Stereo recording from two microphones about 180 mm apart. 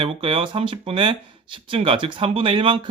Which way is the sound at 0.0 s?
30° right (ahead or behind).